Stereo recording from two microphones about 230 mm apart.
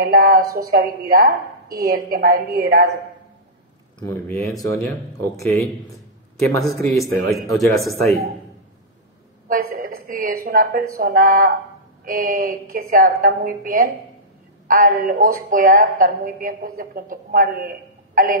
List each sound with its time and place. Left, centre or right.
0.0 s a woman's voice: right
4.0 s a man's voice: centre
7.0 s a man's voice: centre
7.7 s speech: centre
9.5 s a woman's voice: right